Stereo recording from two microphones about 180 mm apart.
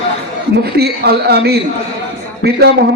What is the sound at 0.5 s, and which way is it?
A man's voice, 60° right (ahead or behind).